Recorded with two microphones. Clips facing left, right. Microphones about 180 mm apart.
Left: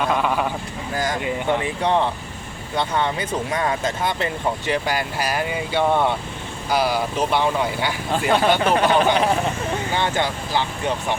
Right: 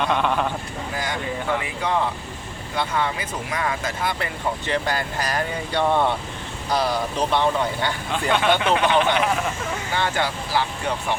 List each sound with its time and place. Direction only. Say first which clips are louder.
0.0 s speech: left 1 dB; 5° left (ahead or behind)
1.2 s speech: left 4 dB; 25° left (ahead or behind); by 7.9 s 10° left (ahead or behind)
8.1 s speech: left 3 dB; 35° left (ahead or behind)
9.9 s speech: even; 20° left (ahead or behind)